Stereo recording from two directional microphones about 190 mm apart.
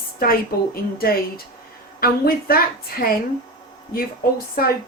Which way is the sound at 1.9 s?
50° left (ahead or behind).